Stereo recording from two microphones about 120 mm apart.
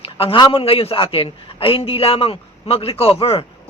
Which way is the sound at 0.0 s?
50° left (ahead or behind).